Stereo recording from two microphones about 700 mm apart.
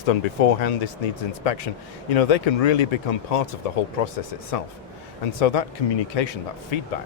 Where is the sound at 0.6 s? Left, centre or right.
Left.